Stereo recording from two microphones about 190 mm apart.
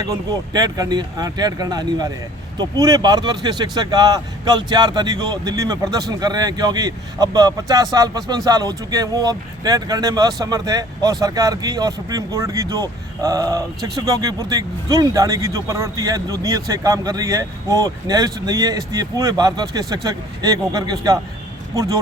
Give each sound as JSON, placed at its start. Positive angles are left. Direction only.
{"t": 0.0, "sound": "speech", "side_deg": -20}